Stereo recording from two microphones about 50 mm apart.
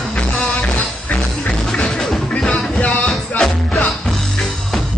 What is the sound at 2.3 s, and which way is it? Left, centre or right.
Music, left.